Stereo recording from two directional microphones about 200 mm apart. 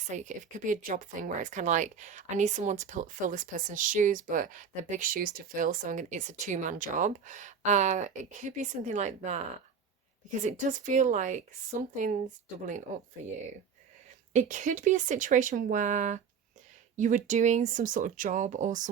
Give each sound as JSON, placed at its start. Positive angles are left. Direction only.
{"t": 0.2, "sound": "speech", "side_deg": -40}
{"t": 10.4, "sound": "speech", "side_deg": -40}
{"t": 14.3, "sound": "speech", "side_deg": -40}